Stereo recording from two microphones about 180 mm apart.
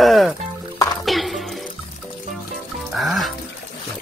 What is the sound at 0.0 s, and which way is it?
Music, centre (ahead or behind).